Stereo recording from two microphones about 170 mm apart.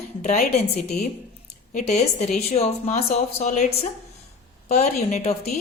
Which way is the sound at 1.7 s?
40° left (ahead or behind).